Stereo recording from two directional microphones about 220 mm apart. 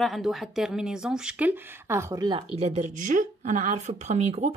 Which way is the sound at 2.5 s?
30° right (ahead or behind).